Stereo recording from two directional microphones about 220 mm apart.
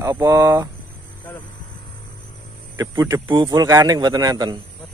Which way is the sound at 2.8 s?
15° right (ahead or behind).